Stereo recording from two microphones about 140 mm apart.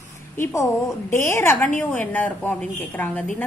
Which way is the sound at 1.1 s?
20° left (ahead or behind).